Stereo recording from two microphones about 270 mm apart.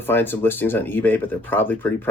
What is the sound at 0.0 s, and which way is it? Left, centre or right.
Speech, centre.